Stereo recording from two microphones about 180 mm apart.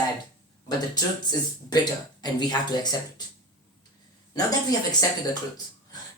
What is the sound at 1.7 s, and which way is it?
Speech, 25° left (ahead or behind).